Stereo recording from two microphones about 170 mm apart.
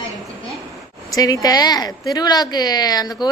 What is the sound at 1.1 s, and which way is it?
A woman's voice, 20° left (ahead or behind).